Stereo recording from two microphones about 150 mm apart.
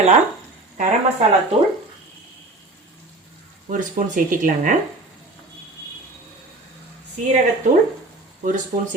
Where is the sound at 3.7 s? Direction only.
60° right (ahead or behind).